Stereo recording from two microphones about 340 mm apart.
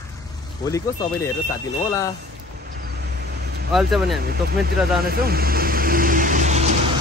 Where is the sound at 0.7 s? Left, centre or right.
Centre.